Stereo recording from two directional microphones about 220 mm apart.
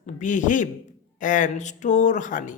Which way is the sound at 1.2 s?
35° left (ahead or behind).